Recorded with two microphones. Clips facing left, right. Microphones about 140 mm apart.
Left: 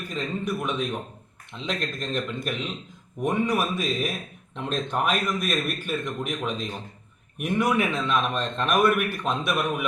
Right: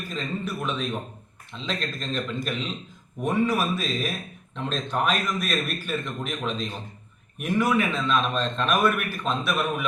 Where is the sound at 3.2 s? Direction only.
15° left (ahead or behind).